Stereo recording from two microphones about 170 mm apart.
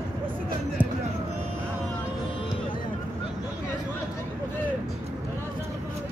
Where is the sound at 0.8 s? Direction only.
10° right (ahead or behind).